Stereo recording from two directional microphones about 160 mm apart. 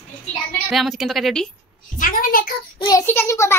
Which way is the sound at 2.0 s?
60° left (ahead or behind).